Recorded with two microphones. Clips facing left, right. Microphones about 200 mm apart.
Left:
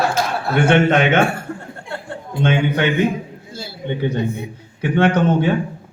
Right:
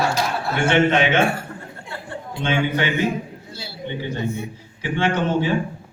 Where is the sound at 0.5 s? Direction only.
55° left (ahead or behind).